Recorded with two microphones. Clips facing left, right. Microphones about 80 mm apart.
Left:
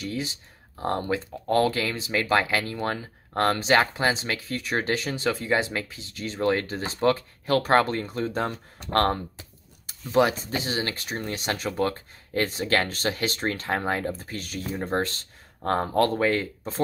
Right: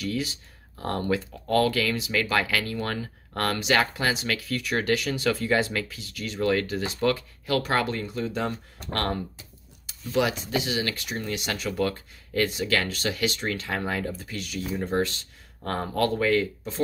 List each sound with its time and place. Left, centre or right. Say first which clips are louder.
0.0 s speech: right 2 dB; left